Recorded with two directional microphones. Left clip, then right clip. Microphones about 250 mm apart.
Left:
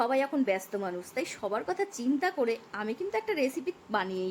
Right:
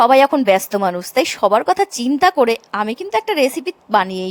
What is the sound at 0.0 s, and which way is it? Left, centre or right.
A woman's voice, right.